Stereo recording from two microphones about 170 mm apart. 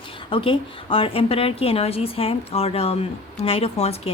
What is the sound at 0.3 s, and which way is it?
A woman's voice, 30° left (ahead or behind).